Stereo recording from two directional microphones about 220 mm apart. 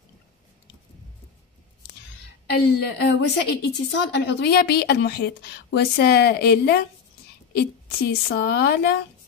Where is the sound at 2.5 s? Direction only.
50° left (ahead or behind).